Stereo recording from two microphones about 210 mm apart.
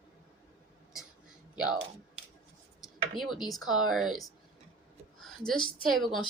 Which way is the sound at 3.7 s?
Centre (ahead or behind).